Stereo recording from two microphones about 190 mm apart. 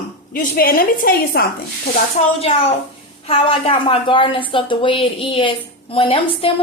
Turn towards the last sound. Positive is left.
turn(degrees=30)  # may be behind; listen again after turning